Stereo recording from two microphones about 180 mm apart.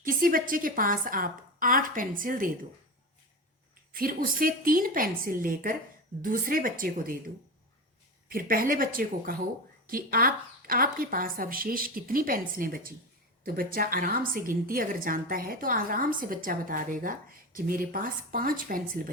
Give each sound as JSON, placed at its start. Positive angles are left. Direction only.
{"t": 0.0, "sound": "a woman's voice", "side_deg": -50}
{"t": 3.9, "sound": "a woman's voice", "side_deg": -50}
{"t": 8.3, "sound": "a woman's voice", "side_deg": -55}